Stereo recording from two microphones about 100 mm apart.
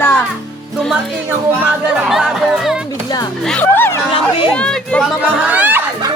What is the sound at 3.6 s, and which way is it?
Music, 20° left (ahead or behind).